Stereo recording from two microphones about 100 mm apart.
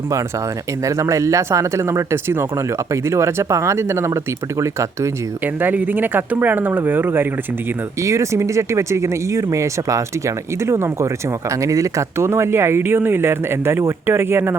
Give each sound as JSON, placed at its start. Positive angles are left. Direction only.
{"t": 0.9, "sound": "speech", "side_deg": -30}
{"t": 5.5, "sound": "speech", "side_deg": -20}